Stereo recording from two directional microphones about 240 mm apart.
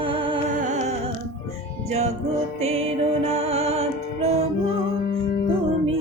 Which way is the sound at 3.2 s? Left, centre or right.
Right.